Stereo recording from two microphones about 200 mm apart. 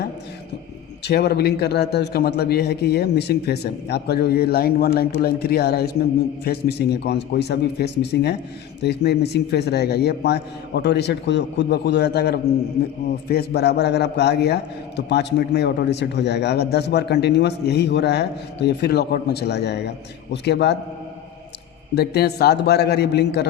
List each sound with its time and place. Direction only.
1.0 s a man's voice: 55° left (ahead or behind)
21.9 s a man's voice: 55° left (ahead or behind)